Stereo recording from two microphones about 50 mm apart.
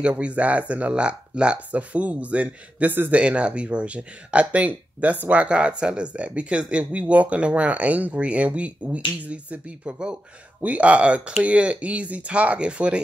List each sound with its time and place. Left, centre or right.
0.2 s speech: right